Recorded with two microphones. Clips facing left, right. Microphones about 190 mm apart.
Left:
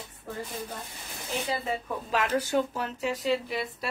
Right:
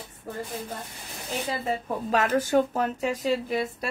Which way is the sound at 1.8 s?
45° right (ahead or behind).